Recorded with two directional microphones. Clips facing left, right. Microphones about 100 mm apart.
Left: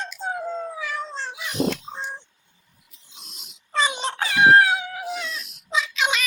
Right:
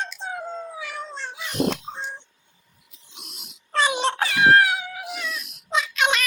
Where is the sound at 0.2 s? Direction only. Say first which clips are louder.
Left 3 dB; 40° left (ahead or behind).